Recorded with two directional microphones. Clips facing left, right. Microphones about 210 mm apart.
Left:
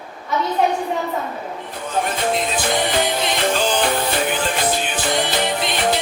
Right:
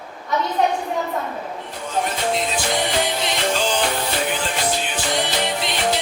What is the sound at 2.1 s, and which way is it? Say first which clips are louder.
Music: left 1 dB; 55° left (ahead or behind).